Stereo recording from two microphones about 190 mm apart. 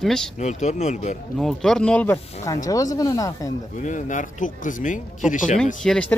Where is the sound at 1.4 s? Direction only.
Centre (ahead or behind); by 3.3 s 20° left (ahead or behind).